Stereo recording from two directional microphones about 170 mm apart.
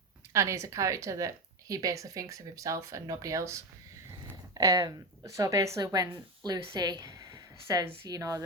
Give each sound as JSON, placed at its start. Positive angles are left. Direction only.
{"t": 0.3, "sound": "speech", "side_deg": -15}